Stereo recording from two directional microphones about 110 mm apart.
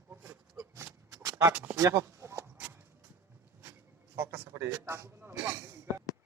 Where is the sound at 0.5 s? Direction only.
35° right (ahead or behind); by 2.7 s 20° right (ahead or behind).